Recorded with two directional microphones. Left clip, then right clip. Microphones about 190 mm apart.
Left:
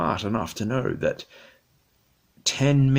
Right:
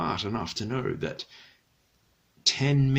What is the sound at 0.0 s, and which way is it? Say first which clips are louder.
Speech: left 4 dB; 30° left (ahead or behind).